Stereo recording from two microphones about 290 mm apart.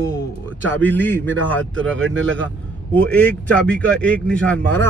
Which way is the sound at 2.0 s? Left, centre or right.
Right.